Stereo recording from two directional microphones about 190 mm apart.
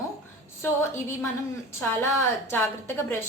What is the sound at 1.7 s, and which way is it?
Speech, 15° left (ahead or behind).